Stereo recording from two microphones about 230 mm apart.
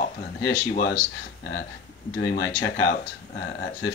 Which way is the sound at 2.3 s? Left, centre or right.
Left.